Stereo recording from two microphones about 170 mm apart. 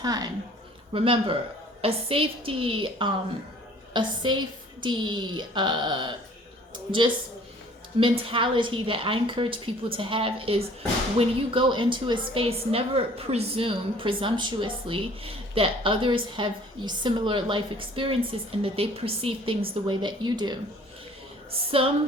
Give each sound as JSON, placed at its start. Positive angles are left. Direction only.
{"t": 0.0, "sound": "a woman's voice", "side_deg": -20}